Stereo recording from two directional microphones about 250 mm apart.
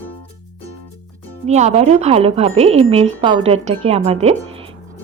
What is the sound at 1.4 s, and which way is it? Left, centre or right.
A woman's voice, right.